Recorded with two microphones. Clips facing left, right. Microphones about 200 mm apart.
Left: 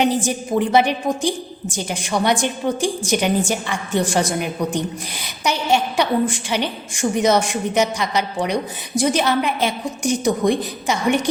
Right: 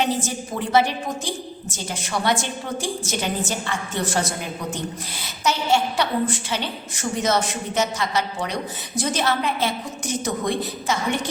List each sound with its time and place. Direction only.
0.0 s a woman's voice: 15° left (ahead or behind)